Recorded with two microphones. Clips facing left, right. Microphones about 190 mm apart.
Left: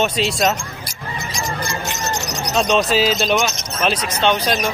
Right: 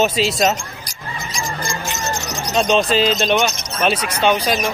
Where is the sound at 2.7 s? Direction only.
5° left (ahead or behind).